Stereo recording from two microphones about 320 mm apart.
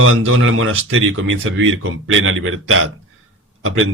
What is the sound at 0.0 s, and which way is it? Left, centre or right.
A man's voice, right.